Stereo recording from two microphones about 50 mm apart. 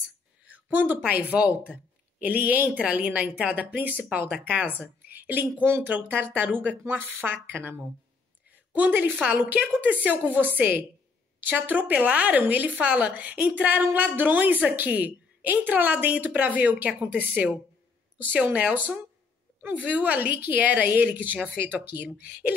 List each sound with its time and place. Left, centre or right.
0.5 s a woman's voice: right
1.3 s a woman's voice: right
3.7 s a woman's voice: right
8.5 s a sound: right
9.3 s a woman's voice: right